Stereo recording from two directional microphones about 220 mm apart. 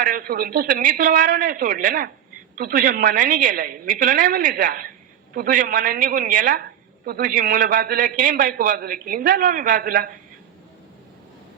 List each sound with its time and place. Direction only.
0.1 s a woman's voice: 40° right (ahead or behind)